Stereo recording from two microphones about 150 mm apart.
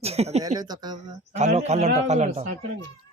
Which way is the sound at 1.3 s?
50° right (ahead or behind).